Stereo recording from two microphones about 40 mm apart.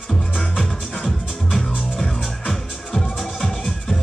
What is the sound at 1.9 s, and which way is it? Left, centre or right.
Music, centre.